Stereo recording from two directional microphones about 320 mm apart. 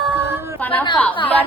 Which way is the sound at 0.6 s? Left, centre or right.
Centre.